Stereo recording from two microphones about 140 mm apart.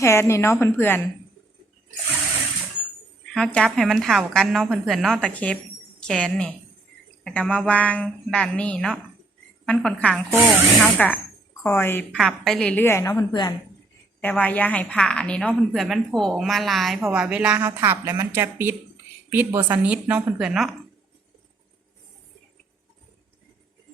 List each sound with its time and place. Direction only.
0.0 s a woman's voice: 20° left (ahead or behind)
3.3 s a woman's voice: 5° left (ahead or behind)
12.1 s a woman's voice: centre (ahead or behind)
12.8 s a woman's voice: 20° left (ahead or behind); by 20.7 s 5° right (ahead or behind)